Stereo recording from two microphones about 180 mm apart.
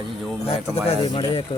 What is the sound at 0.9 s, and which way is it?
Speech, 30° left (ahead or behind).